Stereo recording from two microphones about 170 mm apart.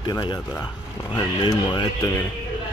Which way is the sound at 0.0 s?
25° left (ahead or behind).